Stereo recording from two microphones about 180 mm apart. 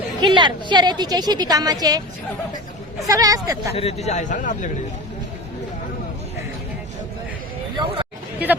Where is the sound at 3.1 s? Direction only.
20° right (ahead or behind).